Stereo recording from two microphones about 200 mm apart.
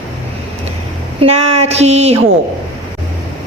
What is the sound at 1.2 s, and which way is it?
Speech, 30° right (ahead or behind).